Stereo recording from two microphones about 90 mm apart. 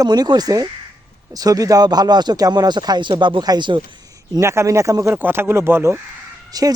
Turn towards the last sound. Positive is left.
turn(degrees=-45)  # may be behind; listen again after turning